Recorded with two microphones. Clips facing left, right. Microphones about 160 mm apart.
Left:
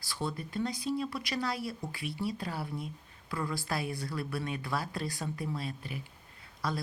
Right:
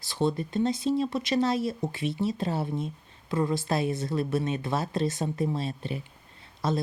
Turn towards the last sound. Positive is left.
turn(degrees=-25)  # may be behind; listen again after turning